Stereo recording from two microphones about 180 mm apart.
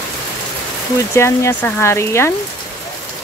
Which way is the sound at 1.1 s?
15° left (ahead or behind).